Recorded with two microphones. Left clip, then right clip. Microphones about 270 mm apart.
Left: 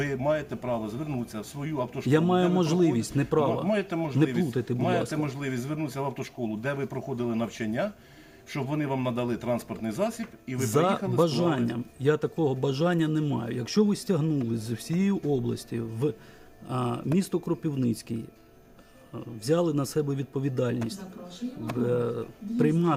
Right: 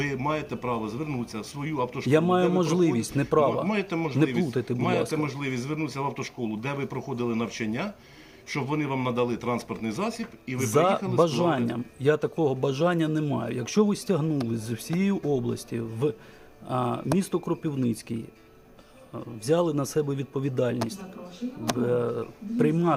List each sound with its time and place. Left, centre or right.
0.3 s speech: centre
2.0 s speech: left
3.7 s speech: centre
10.7 s speech: left
19.5 s speech: left
21.8 s speech: left